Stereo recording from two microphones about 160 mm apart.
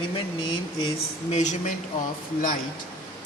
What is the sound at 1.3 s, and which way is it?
Speech, 50° left (ahead or behind).